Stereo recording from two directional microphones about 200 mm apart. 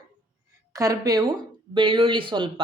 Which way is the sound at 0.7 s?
15° right (ahead or behind).